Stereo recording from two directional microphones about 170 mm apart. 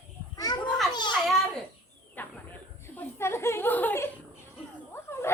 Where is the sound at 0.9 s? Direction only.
25° left (ahead or behind).